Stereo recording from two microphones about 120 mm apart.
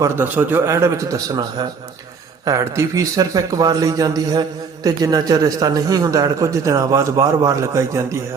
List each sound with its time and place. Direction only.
0.0 s a man's voice: 20° right (ahead or behind)